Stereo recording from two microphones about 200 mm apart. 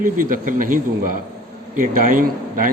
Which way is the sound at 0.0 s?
45° right (ahead or behind).